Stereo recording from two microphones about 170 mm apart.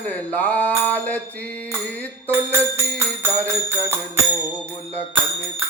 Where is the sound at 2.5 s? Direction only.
15° right (ahead or behind).